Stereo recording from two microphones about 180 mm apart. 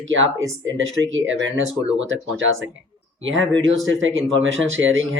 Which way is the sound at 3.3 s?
90° right.